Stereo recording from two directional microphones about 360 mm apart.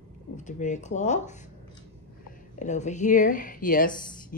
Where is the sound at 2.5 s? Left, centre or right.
Centre.